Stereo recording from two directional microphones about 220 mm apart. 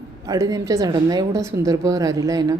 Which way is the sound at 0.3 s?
15° right (ahead or behind).